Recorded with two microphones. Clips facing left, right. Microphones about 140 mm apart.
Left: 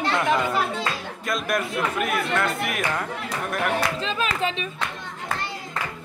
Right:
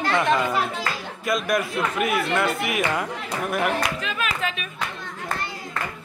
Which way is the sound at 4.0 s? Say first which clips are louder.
Left 2 dB; 30° left (ahead or behind).